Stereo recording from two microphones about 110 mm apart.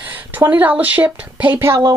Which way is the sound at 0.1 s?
15° right (ahead or behind).